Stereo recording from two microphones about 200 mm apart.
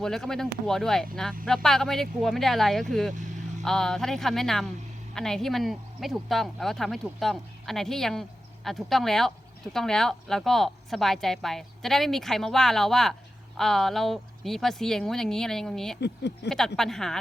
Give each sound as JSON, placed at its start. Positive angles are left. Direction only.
{"t": 0.0, "sound": "speech", "side_deg": 0}
{"t": 16.0, "sound": "speech", "side_deg": 55}
{"t": 16.5, "sound": "speech", "side_deg": 5}